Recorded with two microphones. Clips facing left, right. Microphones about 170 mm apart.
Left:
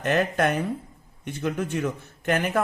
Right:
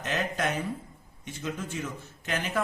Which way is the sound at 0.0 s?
60° left (ahead or behind).